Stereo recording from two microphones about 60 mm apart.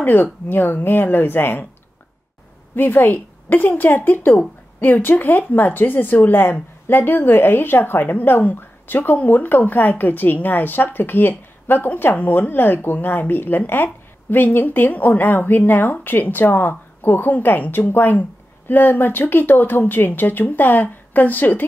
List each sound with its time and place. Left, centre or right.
0.0 s speech: left
2.7 s speech: left